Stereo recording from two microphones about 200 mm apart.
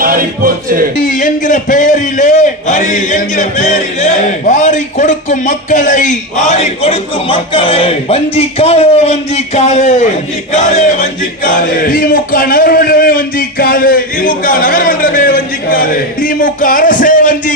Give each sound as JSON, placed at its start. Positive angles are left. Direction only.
{"t": 0.0, "sound": "music", "side_deg": -45}
{"t": 0.9, "sound": "a man's voice", "side_deg": 40}
{"t": 10.5, "sound": "a sound", "side_deg": 35}